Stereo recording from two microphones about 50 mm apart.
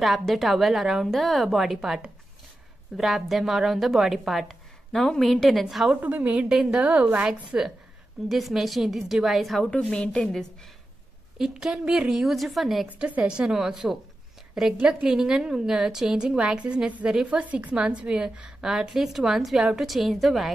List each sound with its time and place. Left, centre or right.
0.0 s a woman's voice: centre
1.0 s a woman's voice: centre
3.0 s a woman's voice: centre
5.9 s a woman's voice: right
6.5 s a woman's voice: centre
6.8 s a woman's voice: right
8.3 s a woman's voice: centre
9.7 s a woman's voice: left
11.3 s a woman's voice: centre
13.2 s a woman's voice: centre
15.0 s a woman's voice: centre
18.7 s a woman's voice: centre